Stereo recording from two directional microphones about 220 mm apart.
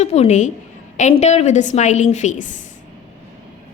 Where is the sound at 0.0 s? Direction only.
30° left (ahead or behind).